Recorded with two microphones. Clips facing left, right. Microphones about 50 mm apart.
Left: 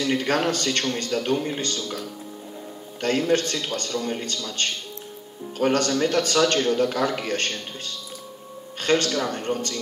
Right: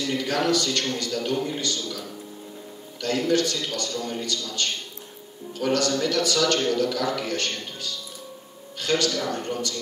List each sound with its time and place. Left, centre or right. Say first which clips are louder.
0.0 s a man's voice: left 2 dB; left